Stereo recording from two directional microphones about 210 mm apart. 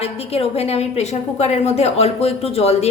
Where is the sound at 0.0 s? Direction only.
30° left (ahead or behind).